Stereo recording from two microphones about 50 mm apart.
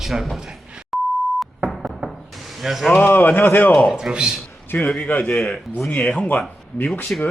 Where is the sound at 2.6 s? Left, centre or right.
Centre.